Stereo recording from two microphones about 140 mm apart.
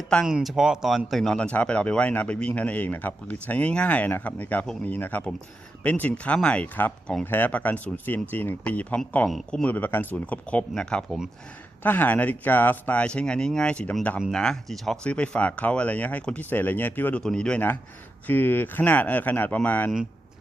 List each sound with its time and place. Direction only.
0.3 s speech: 5° right (ahead or behind)